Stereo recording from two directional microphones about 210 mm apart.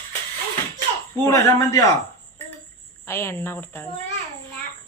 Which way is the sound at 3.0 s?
10° left (ahead or behind).